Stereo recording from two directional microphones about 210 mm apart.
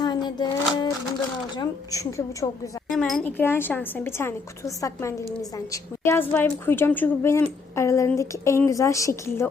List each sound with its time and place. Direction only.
0.0 s a sound: 20° left (ahead or behind)
1.5 s speech: 15° left (ahead or behind)
2.9 s speech: 5° left (ahead or behind)